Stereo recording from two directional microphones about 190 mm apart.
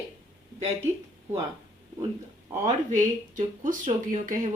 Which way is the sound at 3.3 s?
45° right (ahead or behind).